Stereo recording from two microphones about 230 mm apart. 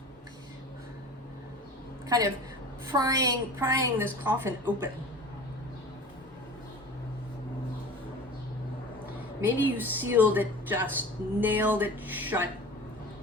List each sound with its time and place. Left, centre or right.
2.0 s a woman's voice: centre
9.4 s a woman's voice: centre